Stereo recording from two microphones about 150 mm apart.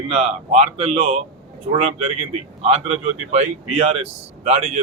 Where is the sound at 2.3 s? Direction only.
50° right (ahead or behind).